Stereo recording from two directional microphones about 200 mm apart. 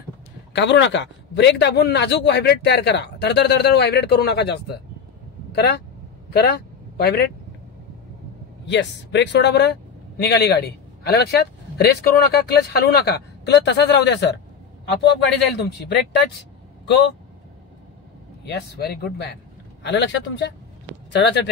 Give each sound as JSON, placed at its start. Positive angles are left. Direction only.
{"t": 0.5, "sound": "speech", "side_deg": 60}
{"t": 8.6, "sound": "speech", "side_deg": 60}
{"t": 18.4, "sound": "speech", "side_deg": 55}